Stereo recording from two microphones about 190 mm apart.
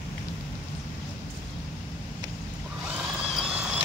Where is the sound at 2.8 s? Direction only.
5° right (ahead or behind).